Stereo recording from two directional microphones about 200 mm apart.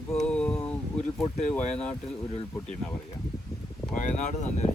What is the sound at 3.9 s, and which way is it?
Speech, 35° left (ahead or behind).